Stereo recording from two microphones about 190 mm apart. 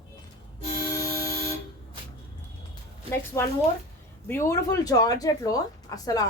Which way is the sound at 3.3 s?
15° left (ahead or behind).